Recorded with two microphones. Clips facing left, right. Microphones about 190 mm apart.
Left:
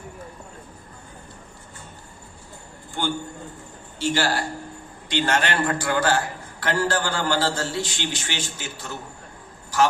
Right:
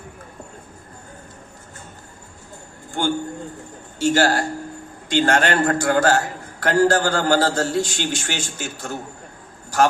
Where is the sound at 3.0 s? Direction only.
45° right (ahead or behind).